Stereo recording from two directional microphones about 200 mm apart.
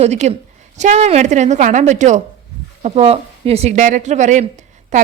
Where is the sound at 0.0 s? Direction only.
35° right (ahead or behind).